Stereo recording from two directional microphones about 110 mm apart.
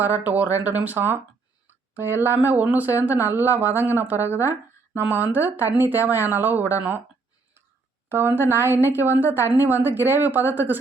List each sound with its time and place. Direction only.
0.3 s speech: 15° right (ahead or behind)
8.1 s speech: 20° right (ahead or behind)